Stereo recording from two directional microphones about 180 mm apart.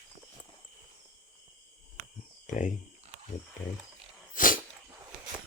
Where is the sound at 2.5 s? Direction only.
45° left (ahead or behind).